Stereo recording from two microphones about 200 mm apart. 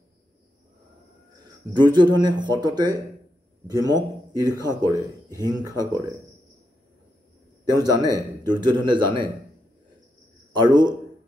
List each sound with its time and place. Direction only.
1.7 s a man's voice: 20° right (ahead or behind)
7.6 s a man's voice: 20° right (ahead or behind)
10.5 s a man's voice: 20° right (ahead or behind)